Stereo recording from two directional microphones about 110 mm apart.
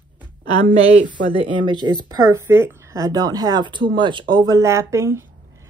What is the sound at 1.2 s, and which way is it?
Speech, 45° left (ahead or behind).